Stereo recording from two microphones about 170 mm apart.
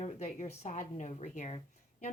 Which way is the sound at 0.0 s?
40° left (ahead or behind).